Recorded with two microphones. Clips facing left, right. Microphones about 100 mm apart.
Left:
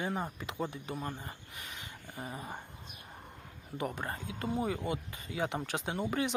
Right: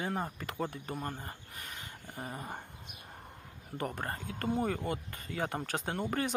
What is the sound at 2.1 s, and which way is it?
Speech, 35° right (ahead or behind).